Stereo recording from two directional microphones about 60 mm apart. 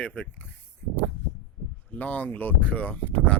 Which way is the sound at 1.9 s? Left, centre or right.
Left.